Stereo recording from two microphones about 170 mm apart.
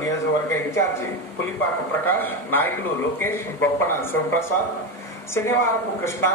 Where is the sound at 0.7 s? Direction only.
15° left (ahead or behind).